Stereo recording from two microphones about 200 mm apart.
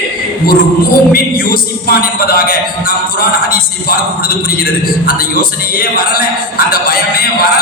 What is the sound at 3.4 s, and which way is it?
Music, 45° left (ahead or behind).